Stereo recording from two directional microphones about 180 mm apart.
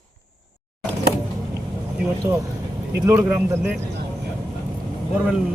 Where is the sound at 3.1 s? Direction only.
10° right (ahead or behind).